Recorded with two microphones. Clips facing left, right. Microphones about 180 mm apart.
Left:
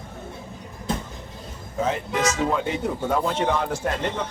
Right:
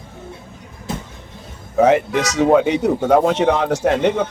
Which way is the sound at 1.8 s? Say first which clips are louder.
Right 9 dB; 75° right (ahead or behind).